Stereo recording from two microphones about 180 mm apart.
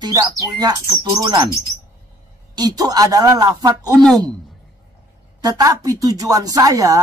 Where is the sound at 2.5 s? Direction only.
20° right (ahead or behind).